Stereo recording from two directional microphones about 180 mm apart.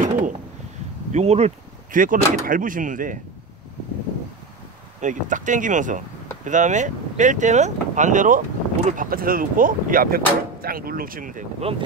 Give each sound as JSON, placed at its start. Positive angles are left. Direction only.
{"t": 0.0, "sound": "a sound", "side_deg": -45}
{"t": 1.1, "sound": "speech", "side_deg": -35}
{"t": 5.0, "sound": "speech", "side_deg": -45}
{"t": 11.6, "sound": "speech", "side_deg": -30}